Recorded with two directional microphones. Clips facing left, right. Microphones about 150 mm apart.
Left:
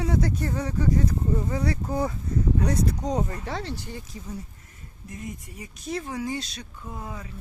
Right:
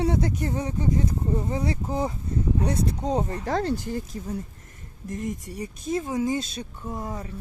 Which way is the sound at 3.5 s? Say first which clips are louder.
Right 7 dB; 45° right (ahead or behind).